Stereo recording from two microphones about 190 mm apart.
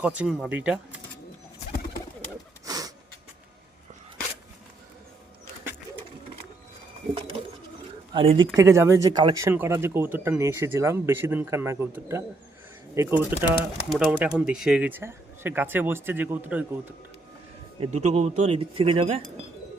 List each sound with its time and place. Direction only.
0.0 s speech: 5° right (ahead or behind)
2.6 s snort: 20° right (ahead or behind)
8.1 s speech: 30° right (ahead or behind)
8.5 s speech: 15° right (ahead or behind)
17.7 s speech: 35° right (ahead or behind)